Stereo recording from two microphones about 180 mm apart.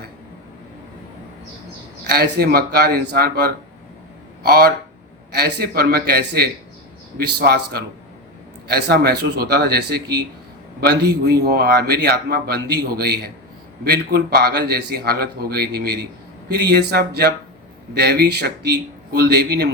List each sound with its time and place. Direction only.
2.0 s a man's voice: 60° right (ahead or behind)